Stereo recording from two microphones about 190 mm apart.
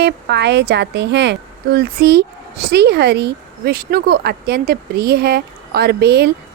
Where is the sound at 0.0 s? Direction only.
60° right (ahead or behind).